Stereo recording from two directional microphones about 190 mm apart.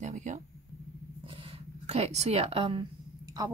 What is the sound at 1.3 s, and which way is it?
A woman's voice, 30° right (ahead or behind).